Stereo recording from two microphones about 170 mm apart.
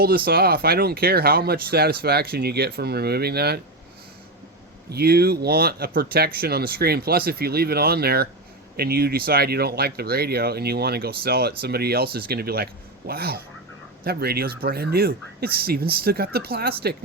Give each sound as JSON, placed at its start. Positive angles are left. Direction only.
{"t": 0.0, "sound": "speech", "side_deg": -65}
{"t": 4.9, "sound": "speech", "side_deg": -70}